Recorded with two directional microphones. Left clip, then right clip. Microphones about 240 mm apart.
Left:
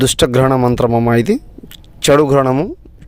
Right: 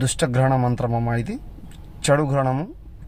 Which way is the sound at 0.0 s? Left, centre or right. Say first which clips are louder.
Left 10 dB; left.